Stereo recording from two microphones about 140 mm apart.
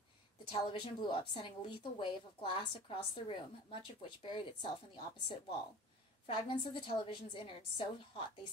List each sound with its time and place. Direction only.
0.5 s a woman's voice: 35° left (ahead or behind)